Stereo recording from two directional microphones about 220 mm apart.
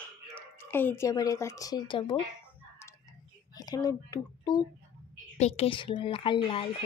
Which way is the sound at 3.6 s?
15° left (ahead or behind).